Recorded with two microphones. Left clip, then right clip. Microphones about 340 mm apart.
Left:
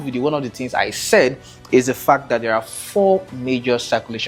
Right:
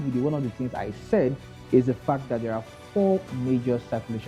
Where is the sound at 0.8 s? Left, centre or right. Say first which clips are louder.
Left 11 dB; centre.